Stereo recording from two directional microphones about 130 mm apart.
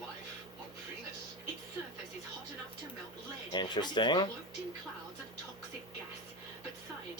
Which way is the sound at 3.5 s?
35° left (ahead or behind).